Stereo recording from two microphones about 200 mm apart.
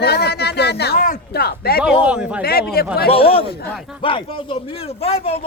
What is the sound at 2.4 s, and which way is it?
Speech, 50° left (ahead or behind).